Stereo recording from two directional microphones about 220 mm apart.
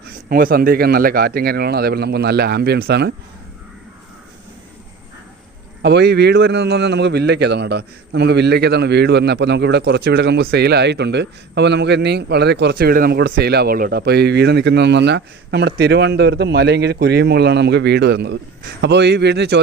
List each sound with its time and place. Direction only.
0.0 s a man's voice: 40° right (ahead or behind)
5.8 s a man's voice: 50° right (ahead or behind)